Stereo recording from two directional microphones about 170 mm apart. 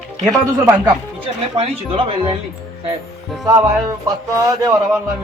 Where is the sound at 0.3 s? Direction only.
20° right (ahead or behind).